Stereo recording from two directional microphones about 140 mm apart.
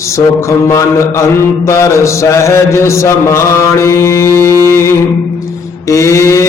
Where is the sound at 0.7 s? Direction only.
20° left (ahead or behind).